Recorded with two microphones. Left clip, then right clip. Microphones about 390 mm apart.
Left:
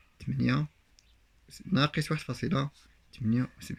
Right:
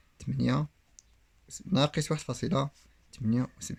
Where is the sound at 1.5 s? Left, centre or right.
Centre.